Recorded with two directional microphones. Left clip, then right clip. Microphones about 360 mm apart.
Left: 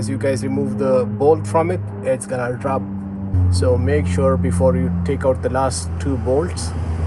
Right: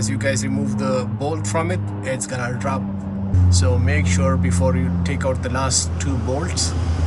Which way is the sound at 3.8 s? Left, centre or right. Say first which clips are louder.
Left 4 dB; centre.